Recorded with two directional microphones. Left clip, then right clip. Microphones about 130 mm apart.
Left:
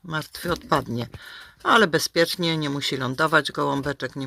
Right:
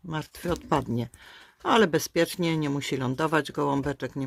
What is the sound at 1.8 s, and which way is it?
Speech, 10° right (ahead or behind).